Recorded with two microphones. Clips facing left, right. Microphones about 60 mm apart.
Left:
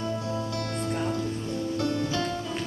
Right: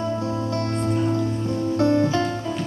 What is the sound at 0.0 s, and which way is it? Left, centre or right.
Music, right.